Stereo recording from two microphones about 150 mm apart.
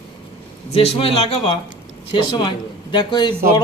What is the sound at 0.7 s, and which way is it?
Speech, 40° left (ahead or behind).